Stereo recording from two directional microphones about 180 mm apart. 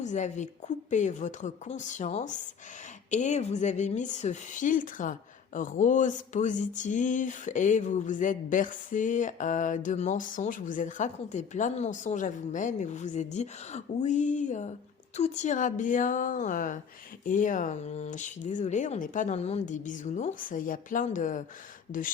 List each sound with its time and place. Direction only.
0.0 s a woman's voice: 40° left (ahead or behind)